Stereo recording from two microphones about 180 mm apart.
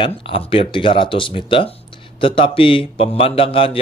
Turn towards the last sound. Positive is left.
turn(degrees=30)  # may be behind; listen again after turning